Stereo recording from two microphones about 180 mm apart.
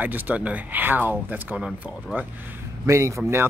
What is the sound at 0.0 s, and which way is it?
Speech, 10° right (ahead or behind).